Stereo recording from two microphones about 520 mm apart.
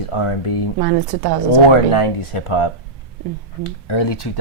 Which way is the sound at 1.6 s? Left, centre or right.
Left.